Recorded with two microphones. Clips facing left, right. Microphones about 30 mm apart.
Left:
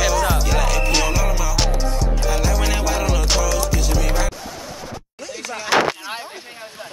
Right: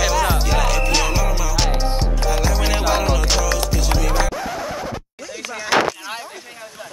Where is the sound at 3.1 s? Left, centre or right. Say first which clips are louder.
Even; centre.